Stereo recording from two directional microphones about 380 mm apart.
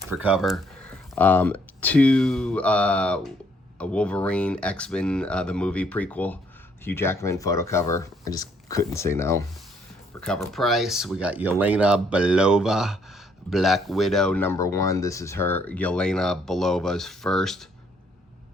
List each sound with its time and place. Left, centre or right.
0.1 s speech: centre